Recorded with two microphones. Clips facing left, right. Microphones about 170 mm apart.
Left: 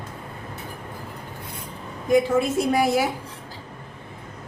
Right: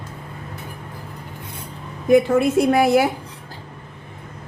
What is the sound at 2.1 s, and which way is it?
A woman's voice, 60° right (ahead or behind).